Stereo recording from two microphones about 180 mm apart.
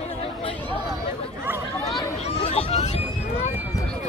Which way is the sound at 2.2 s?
35° left (ahead or behind).